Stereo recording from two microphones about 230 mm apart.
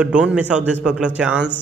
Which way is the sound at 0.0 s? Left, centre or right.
Centre.